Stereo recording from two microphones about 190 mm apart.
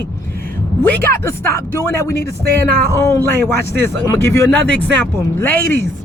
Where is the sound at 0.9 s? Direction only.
15° left (ahead or behind).